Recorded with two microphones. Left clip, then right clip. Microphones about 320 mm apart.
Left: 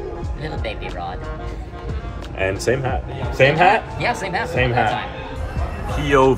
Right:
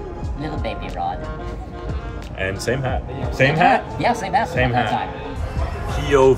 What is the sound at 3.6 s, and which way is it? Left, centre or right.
Speech, centre.